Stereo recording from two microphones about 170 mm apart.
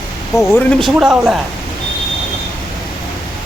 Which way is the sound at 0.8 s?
Centre (ahead or behind).